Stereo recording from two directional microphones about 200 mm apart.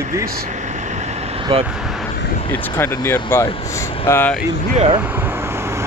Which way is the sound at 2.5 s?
10° left (ahead or behind).